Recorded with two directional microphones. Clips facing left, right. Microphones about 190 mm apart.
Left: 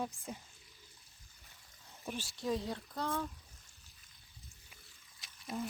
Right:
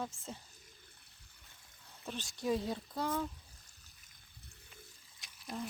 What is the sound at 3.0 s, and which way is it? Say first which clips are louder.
Speech: right 1 dB; 5° right (ahead or behind).